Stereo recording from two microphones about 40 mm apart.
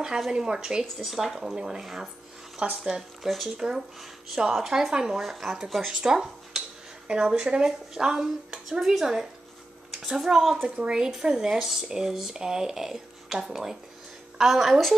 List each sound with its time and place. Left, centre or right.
0.3 s speech: centre
2.6 s speech: right
3.3 s speech: centre
3.5 s speech: centre
4.0 s speech: centre
10.8 s speech: centre